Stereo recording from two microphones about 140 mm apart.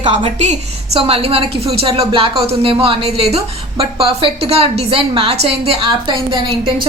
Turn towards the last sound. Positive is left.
turn(degrees=-35)  # may be behind; listen again after turning